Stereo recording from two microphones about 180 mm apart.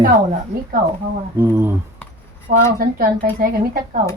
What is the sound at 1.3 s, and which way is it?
Speech, 15° right (ahead or behind).